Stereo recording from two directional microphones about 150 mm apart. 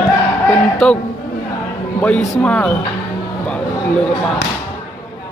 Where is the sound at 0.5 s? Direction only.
5° left (ahead or behind).